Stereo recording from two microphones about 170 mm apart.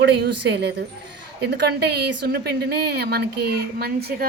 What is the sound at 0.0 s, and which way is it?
A woman's voice, 85° right.